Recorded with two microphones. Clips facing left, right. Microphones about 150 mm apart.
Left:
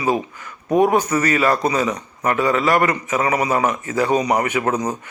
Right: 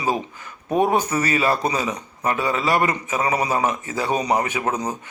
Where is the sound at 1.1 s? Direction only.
25° right (ahead or behind).